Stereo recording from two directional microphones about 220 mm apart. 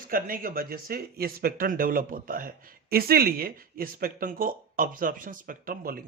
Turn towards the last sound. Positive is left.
turn(degrees=-40)  # may be behind; listen again after turning